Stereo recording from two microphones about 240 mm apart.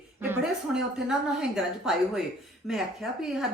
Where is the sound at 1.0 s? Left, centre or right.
Centre.